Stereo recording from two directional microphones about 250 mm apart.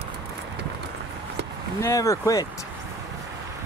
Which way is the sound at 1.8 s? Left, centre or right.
Centre.